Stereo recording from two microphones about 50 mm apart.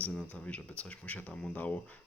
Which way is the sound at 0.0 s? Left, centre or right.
Left.